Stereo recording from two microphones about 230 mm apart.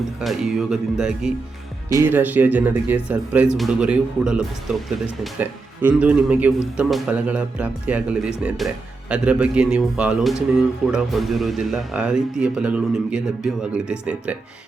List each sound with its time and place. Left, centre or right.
0.2 s a man's voice: centre